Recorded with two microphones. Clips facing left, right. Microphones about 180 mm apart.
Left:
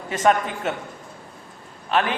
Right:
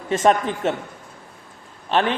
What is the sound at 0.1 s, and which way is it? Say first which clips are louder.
Speech: right 2 dB; 30° right (ahead or behind).